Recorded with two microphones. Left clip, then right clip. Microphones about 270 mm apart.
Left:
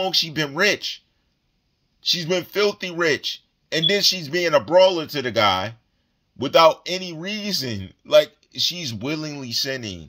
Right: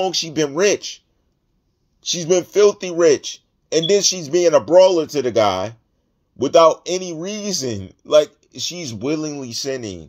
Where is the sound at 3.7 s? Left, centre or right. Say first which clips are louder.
Right 3 dB; centre.